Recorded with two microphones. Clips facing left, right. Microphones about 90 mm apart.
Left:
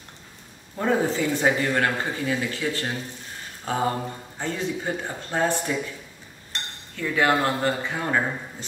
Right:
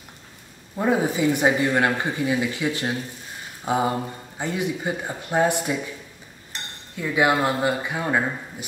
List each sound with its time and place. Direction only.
0.7 s speech: 10° right (ahead or behind)
7.0 s speech: 15° right (ahead or behind)